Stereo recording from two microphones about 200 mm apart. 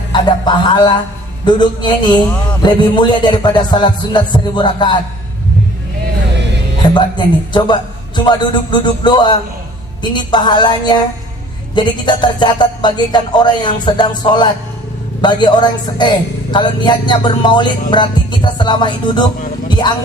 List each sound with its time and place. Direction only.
0.1 s a woman's voice: 20° left (ahead or behind)
6.9 s a woman's voice: 20° left (ahead or behind)